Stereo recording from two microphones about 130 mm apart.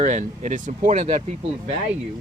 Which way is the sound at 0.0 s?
70° right (ahead or behind).